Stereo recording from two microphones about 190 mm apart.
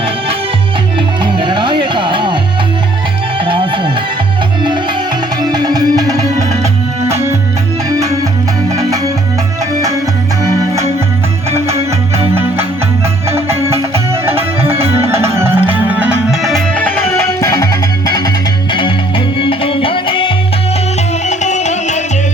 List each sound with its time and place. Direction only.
1.2 s music: 25° right (ahead or behind)
3.4 s music: 25° right (ahead or behind)
5.4 s music: 20° right (ahead or behind)
11.7 s music: 30° right (ahead or behind)
14.1 s music: 10° right (ahead or behind); by 20.3 s 25° left (ahead or behind)
21.2 s music: 40° left (ahead or behind)